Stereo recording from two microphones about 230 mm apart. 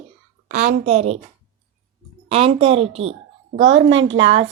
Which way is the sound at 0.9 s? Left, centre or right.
Right.